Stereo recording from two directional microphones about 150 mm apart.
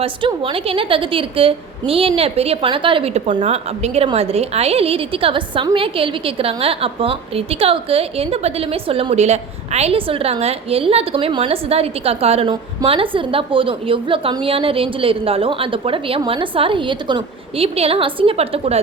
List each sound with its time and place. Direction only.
0.0 s a woman's voice: 35° right (ahead or behind)